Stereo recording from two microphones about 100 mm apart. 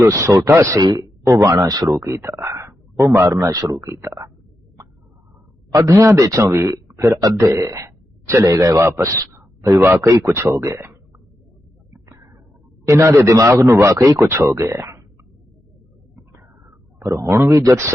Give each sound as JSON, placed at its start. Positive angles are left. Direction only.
{"t": 0.0, "sound": "speech", "side_deg": -30}
{"t": 0.8, "sound": "speech", "side_deg": -40}
{"t": 1.2, "sound": "speech", "side_deg": -30}
{"t": 1.9, "sound": "speech", "side_deg": -25}
{"t": 5.8, "sound": "speech", "side_deg": -30}
{"t": 12.0, "sound": "a sound", "side_deg": -35}
{"t": 12.8, "sound": "speech", "side_deg": -30}
{"t": 16.6, "sound": "a sound", "side_deg": -35}
{"t": 17.2, "sound": "speech", "side_deg": -25}